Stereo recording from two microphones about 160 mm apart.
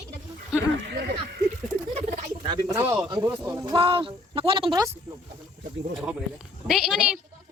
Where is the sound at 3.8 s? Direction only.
35° right (ahead or behind).